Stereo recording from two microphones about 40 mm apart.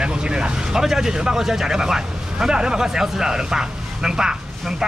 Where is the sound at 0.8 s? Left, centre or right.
Centre.